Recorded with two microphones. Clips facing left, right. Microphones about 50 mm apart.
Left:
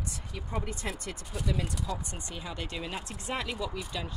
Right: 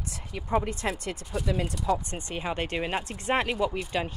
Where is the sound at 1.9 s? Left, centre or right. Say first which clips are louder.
Right 9 dB; right.